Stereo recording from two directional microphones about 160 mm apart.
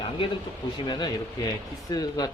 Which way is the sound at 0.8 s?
30° left (ahead or behind).